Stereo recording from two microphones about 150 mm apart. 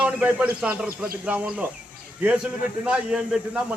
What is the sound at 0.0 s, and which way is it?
A man's voice, 10° right (ahead or behind).